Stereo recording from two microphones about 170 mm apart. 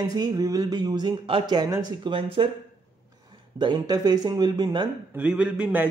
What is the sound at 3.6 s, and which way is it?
Speech, 25° right (ahead or behind).